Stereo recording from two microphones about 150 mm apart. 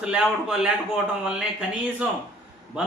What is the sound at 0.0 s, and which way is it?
Speech, 5° right (ahead or behind).